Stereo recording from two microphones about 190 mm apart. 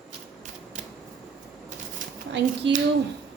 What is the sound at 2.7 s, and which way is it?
Speech, 70° right (ahead or behind).